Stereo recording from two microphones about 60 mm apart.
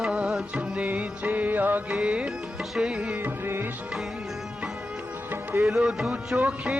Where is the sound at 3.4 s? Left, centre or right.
Right.